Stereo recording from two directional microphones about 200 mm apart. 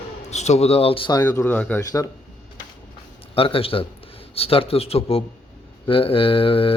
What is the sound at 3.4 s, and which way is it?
Speech, 25° left (ahead or behind).